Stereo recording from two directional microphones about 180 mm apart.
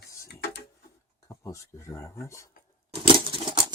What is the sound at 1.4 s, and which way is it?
Speech, 15° left (ahead or behind).